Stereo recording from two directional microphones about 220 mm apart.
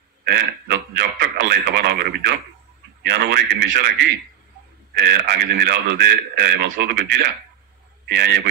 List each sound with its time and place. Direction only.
0.2 s a man's voice: 50° right (ahead or behind)